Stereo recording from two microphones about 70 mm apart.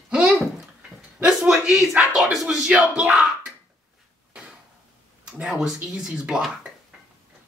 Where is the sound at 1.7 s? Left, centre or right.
Centre.